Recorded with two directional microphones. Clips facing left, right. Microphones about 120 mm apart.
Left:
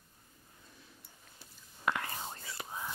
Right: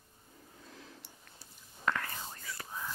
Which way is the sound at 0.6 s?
90° right.